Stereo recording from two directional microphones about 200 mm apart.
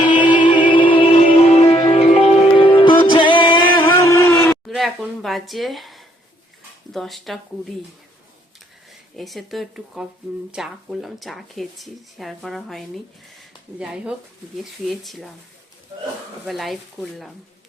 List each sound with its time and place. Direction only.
0.0 s music: 25° left (ahead or behind)
3.8 s a sound: 15° left (ahead or behind)
4.7 s a woman's voice: centre (ahead or behind)
9.1 s speech: centre (ahead or behind)
16.5 s speech: centre (ahead or behind)